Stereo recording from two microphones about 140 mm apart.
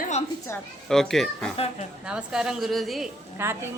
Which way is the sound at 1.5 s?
45° left (ahead or behind).